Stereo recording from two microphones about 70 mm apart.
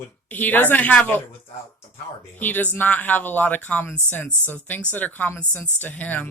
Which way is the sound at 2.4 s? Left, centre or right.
Left.